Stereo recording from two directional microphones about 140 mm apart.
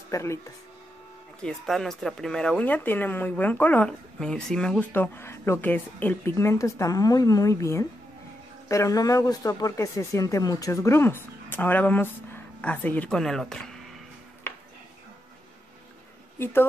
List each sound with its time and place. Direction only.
0.1 s speech: 20° left (ahead or behind)
1.4 s speech: centre (ahead or behind)